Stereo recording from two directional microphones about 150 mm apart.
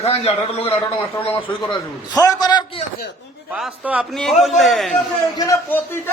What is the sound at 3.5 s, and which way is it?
Speech, 5° right (ahead or behind).